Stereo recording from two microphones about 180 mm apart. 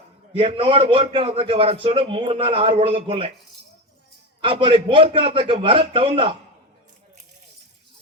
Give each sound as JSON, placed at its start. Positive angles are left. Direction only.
{"t": 0.3, "sound": "a man's voice", "side_deg": -30}
{"t": 4.4, "sound": "a man's voice", "side_deg": -30}